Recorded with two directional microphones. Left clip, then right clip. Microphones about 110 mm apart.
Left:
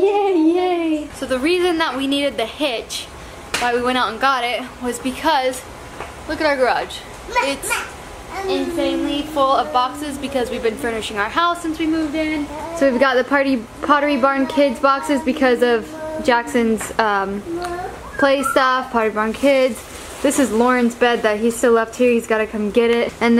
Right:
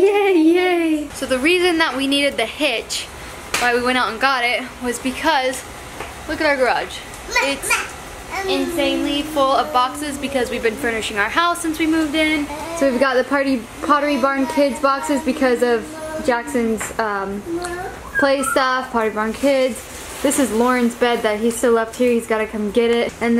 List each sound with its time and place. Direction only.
0.1 s a sound: 20° right (ahead or behind)
1.2 s a woman's voice: centre (ahead or behind)
8.5 s a woman's voice: 5° left (ahead or behind); by 12.3 s 15° right (ahead or behind)
12.8 s a woman's voice: 10° left (ahead or behind)
16.3 s a woman's voice: 20° left (ahead or behind)
18.2 s a woman's voice: 5° left (ahead or behind)